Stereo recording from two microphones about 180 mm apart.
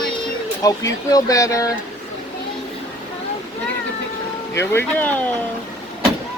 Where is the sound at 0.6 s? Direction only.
20° left (ahead or behind).